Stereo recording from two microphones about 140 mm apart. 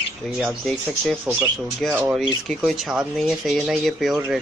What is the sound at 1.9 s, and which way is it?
Speech, 15° right (ahead or behind).